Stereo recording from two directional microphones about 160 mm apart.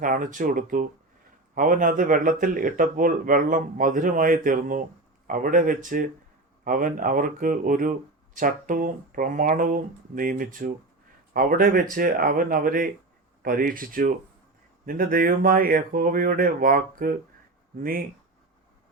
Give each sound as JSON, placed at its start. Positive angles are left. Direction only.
{"t": 0.0, "sound": "speech", "side_deg": -55}